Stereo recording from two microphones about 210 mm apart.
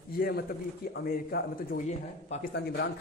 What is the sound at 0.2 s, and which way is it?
Speech, 45° left (ahead or behind).